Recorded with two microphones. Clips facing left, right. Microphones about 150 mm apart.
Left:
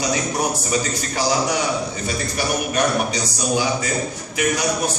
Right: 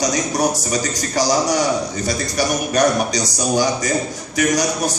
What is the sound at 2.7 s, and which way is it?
A man's voice, 40° right (ahead or behind).